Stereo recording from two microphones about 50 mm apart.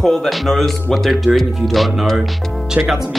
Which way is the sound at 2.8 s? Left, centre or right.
Right.